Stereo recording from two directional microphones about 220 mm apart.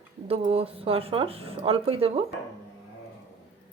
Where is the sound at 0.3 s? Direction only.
25° right (ahead or behind).